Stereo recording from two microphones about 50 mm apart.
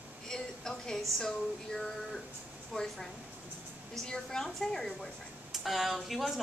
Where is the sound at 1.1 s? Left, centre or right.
Centre.